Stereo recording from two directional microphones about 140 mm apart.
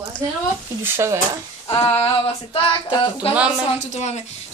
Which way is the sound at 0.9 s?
20° right (ahead or behind).